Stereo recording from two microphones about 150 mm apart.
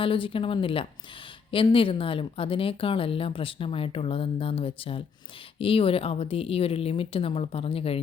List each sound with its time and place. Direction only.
0.0 s speech: 35° left (ahead or behind)